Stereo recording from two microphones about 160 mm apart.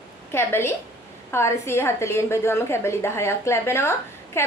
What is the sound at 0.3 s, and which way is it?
A woman's voice, 15° left (ahead or behind).